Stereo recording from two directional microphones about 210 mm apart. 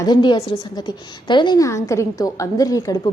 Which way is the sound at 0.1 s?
20° left (ahead or behind).